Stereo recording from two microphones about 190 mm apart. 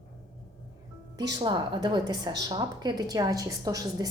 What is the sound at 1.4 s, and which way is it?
A woman's voice, 25° right (ahead or behind).